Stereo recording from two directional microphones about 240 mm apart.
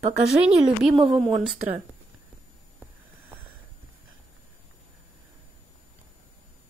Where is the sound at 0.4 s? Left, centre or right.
Centre.